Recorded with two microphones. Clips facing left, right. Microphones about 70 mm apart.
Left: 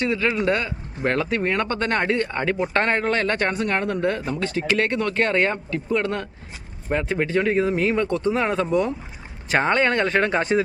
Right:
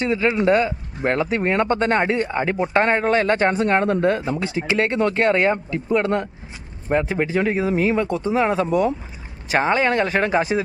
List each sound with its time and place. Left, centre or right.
0.0 s speech: right
4.3 s speech: centre